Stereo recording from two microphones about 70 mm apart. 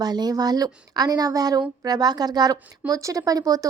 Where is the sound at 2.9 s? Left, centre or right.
Right.